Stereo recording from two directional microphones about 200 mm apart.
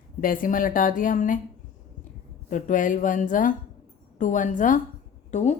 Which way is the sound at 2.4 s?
40° left (ahead or behind).